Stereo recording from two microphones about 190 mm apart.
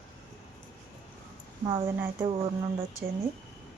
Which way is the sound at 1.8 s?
10° right (ahead or behind).